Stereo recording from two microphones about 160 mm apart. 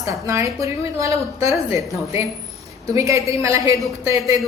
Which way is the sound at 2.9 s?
20° right (ahead or behind).